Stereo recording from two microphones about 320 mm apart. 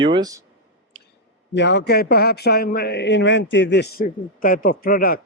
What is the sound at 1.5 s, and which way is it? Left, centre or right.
A man's voice, left.